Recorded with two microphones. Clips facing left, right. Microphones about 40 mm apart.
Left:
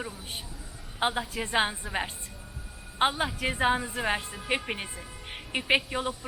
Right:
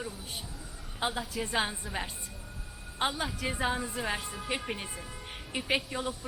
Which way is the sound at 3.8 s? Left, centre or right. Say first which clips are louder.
Left 4 dB; centre.